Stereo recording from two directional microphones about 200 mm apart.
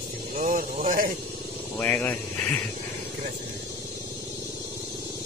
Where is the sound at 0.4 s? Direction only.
40° right (ahead or behind).